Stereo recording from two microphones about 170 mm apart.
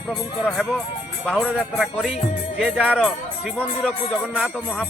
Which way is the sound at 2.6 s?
5° right (ahead or behind).